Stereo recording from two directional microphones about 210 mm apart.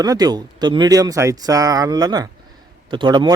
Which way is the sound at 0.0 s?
20° right (ahead or behind).